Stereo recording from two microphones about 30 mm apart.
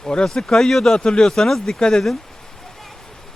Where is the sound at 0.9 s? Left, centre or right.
Left.